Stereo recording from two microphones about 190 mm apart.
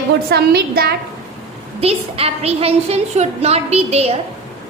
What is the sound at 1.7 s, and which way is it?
A woman's voice, 30° right (ahead or behind).